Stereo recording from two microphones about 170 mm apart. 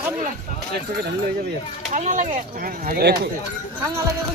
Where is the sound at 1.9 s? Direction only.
45° right (ahead or behind); by 3.3 s 70° right (ahead or behind).